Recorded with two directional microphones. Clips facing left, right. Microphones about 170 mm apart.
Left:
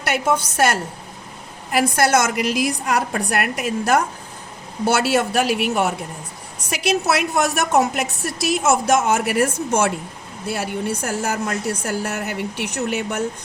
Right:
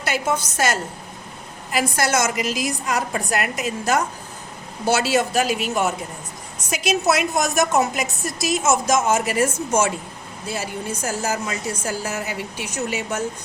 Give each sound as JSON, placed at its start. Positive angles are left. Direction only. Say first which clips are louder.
{"t": 0.0, "sound": "a woman's voice", "louder": "left 3 dB", "side_deg": 60}